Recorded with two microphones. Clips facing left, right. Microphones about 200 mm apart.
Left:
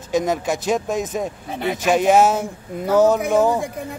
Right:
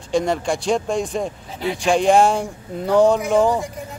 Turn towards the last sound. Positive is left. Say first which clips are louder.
# even
turn(degrees=5)  # may be behind; listen again after turning